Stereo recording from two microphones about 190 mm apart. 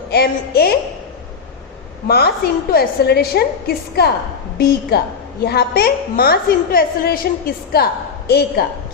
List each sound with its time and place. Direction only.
0.1 s a woman's voice: 55° left (ahead or behind)
2.0 s a woman's voice: 55° left (ahead or behind)
4.5 s a woman's voice: 55° left (ahead or behind)